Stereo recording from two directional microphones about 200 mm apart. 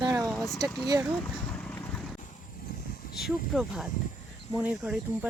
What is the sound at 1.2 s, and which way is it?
Boat, 5° left (ahead or behind).